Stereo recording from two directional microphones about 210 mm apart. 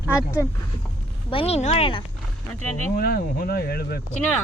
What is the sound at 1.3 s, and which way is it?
Speech, 30° left (ahead or behind).